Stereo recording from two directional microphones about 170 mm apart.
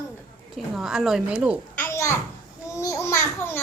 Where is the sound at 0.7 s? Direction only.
Centre (ahead or behind).